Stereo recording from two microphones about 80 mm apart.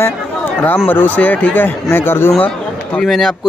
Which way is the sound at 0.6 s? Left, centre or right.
Left.